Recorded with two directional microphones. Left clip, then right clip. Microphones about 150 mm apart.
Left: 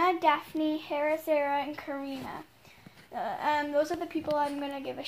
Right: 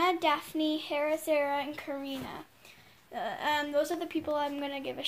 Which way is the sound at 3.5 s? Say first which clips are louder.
Left 1 dB; 20° right (ahead or behind).